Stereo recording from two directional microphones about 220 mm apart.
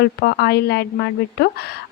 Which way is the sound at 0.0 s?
45° left (ahead or behind).